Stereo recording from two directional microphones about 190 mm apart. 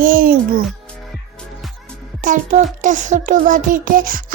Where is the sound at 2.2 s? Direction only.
40° right (ahead or behind).